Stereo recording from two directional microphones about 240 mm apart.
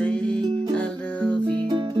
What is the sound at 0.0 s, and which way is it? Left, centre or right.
Music, centre.